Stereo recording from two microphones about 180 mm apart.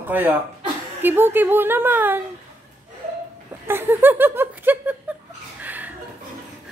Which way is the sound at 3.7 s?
10° right (ahead or behind).